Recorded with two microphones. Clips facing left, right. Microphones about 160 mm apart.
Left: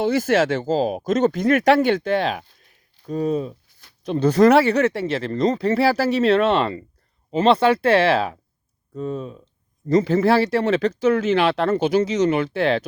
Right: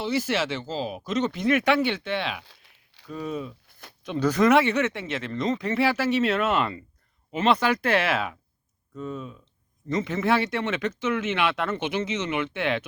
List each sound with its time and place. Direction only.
0.0 s speech: 50° left (ahead or behind)
2.4 s crumpling: 85° right
3.1 s speech: 35° left (ahead or behind)
3.7 s a sound: 60° right (ahead or behind)
4.0 s speech: 35° left (ahead or behind)